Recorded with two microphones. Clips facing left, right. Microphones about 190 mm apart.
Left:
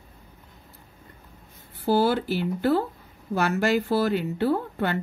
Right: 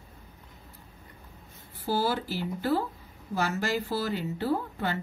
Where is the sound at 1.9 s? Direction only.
60° left (ahead or behind).